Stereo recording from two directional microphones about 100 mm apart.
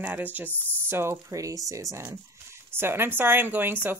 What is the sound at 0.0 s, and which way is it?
Speech, 15° right (ahead or behind).